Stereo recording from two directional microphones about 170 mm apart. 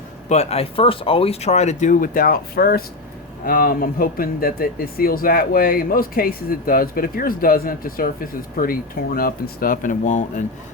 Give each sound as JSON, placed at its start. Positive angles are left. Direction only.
{"t": 0.3, "sound": "speech", "side_deg": 40}